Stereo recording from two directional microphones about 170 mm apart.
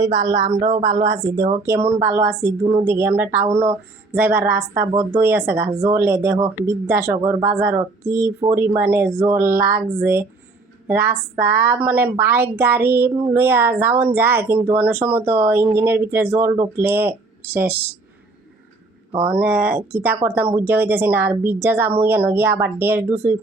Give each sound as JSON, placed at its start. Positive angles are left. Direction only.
{"t": 0.0, "sound": "speech", "side_deg": -30}
{"t": 10.8, "sound": "speech", "side_deg": -15}
{"t": 19.3, "sound": "speech", "side_deg": -10}